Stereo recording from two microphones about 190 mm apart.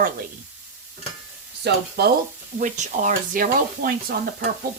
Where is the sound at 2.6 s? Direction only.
40° right (ahead or behind).